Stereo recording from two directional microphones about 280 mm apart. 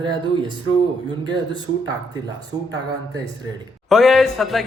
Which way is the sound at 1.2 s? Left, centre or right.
Centre.